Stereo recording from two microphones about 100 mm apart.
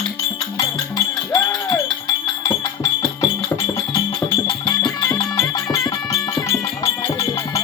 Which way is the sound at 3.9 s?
50° left (ahead or behind).